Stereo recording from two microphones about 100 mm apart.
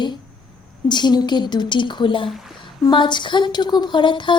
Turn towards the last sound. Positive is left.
turn(degrees=55)  # may be behind; listen again after turning